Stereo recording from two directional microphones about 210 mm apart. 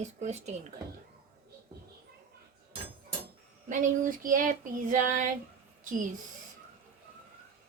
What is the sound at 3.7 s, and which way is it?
A woman's voice, 40° right (ahead or behind).